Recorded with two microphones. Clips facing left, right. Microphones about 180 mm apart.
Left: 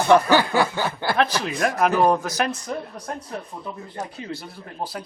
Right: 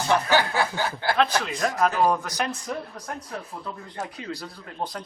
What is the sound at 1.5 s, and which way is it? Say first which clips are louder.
Speech: left 4 dB; 60° left (ahead or behind).